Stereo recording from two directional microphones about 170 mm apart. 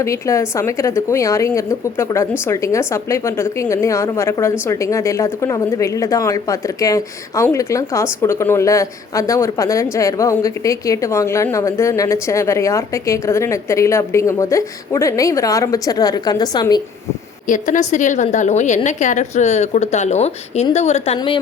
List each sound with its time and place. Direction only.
0.0 s a woman's voice: 15° left (ahead or behind)
17.4 s a woman's voice: 50° left (ahead or behind); by 21.4 s 30° left (ahead or behind)